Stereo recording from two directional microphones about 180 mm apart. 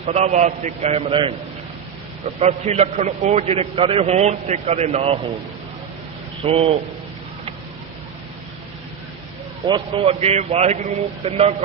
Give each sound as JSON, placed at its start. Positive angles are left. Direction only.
{"t": 0.0, "sound": "a man's voice", "side_deg": -40}
{"t": 2.4, "sound": "a man's voice", "side_deg": -35}
{"t": 6.4, "sound": "a man's voice", "side_deg": -35}
{"t": 9.6, "sound": "a man's voice", "side_deg": -25}